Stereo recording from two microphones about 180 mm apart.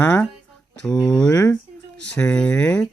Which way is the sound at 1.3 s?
15° left (ahead or behind).